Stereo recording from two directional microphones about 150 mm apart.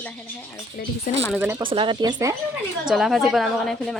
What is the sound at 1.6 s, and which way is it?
Speech, 35° right (ahead or behind).